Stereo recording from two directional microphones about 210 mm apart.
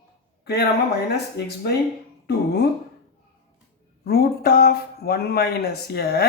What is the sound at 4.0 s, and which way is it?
Speech, 45° left (ahead or behind).